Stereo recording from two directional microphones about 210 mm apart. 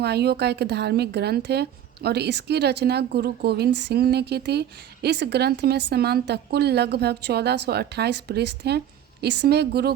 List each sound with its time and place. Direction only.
0.0 s a woman's voice: 50° right (ahead or behind)